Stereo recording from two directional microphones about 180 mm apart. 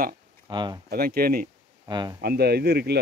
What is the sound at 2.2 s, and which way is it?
Speech, 60° right (ahead or behind).